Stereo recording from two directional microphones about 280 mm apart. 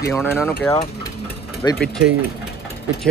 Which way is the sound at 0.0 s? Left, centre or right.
Centre.